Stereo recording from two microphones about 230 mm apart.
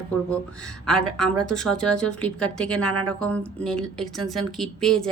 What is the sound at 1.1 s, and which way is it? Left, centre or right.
Speech, right.